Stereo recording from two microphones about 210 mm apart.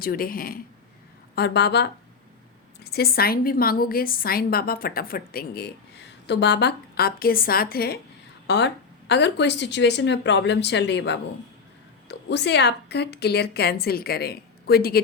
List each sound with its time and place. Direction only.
0.0 s a woman's voice: 45° left (ahead or behind)